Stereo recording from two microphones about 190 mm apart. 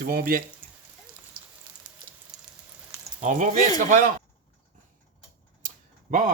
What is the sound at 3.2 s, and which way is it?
Speech, 40° right (ahead or behind).